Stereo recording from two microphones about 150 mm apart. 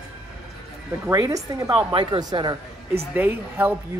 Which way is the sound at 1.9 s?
35° right (ahead or behind).